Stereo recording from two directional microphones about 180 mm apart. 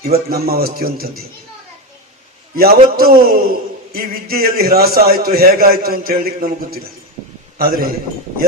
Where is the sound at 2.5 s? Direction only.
55° right (ahead or behind).